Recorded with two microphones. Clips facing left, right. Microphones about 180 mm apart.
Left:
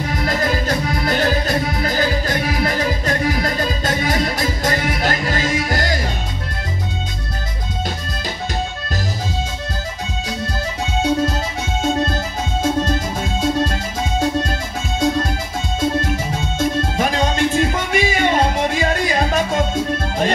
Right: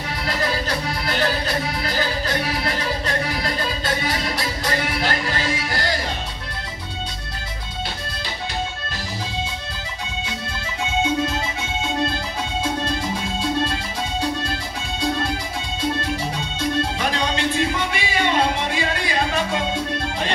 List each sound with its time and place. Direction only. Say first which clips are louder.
0.1 s music: left 3 dB; 45° left (ahead or behind)
11.0 s music: left 4 dB; 40° left (ahead or behind)